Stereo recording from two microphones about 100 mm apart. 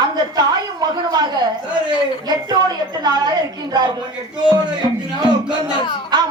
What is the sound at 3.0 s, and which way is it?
Speech, 45° right (ahead or behind).